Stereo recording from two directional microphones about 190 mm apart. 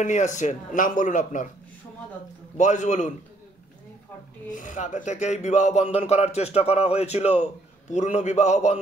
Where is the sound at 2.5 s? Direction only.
40° left (ahead or behind).